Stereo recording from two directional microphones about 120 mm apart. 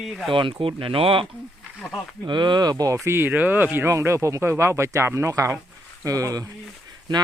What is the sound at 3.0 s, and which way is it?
Speech, 20° right (ahead or behind).